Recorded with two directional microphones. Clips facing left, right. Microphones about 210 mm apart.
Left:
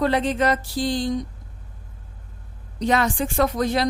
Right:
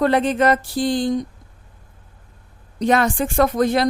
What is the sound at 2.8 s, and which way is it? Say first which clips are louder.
Speech: right 3 dB; 50° right (ahead or behind).